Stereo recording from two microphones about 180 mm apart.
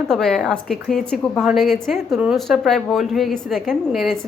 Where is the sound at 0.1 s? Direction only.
Centre (ahead or behind).